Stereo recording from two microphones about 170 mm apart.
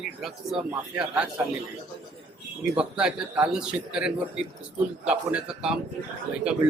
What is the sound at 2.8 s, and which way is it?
Speech, 5° right (ahead or behind).